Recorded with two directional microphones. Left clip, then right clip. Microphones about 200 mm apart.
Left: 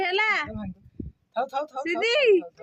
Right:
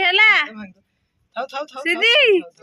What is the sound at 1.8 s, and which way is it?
Speech, 15° right (ahead or behind).